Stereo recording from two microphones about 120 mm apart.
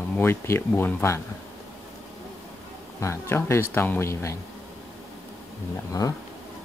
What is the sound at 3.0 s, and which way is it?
Speech, 20° left (ahead or behind).